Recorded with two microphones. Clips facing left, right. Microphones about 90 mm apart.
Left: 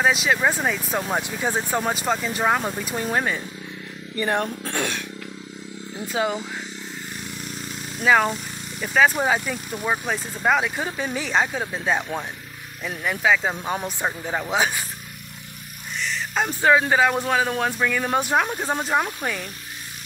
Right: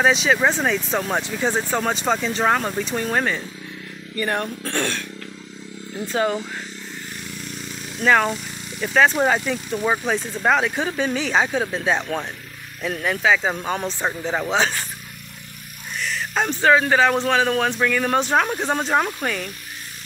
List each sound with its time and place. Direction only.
0.0 s speech: 5° left (ahead or behind)
4.1 s speech: 20° left (ahead or behind)
8.0 s speech: 10° left (ahead or behind)
13.7 s speech: 10° left (ahead or behind)
16.0 s music: centre (ahead or behind)
16.4 s speech: 10° left (ahead or behind)